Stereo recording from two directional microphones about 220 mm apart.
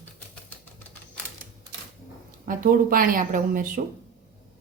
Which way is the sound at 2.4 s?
40° right (ahead or behind).